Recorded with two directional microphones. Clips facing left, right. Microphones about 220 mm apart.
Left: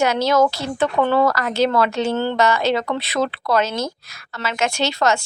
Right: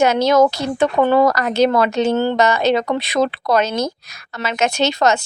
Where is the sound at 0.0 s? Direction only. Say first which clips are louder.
Right 3 dB; 20° right (ahead or behind).